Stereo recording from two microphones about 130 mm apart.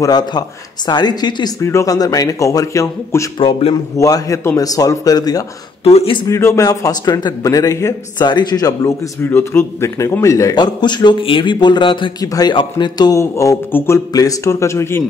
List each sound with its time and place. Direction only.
0.0 s a man's voice: 30° left (ahead or behind)
1.6 s a man's voice: 20° left (ahead or behind)
3.3 s speech: 45° left (ahead or behind)
3.9 s a man's voice: 25° left (ahead or behind)
5.9 s speech: 45° left (ahead or behind)
6.2 s a man's voice: 25° left (ahead or behind)
9.2 s a man's voice: 15° left (ahead or behind)